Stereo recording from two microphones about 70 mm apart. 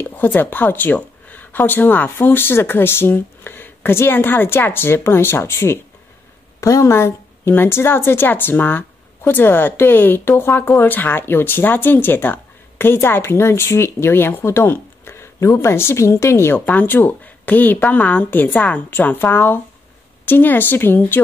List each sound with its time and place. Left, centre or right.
0.1 s speech: left
6.6 s speech: left
16.5 s speech: left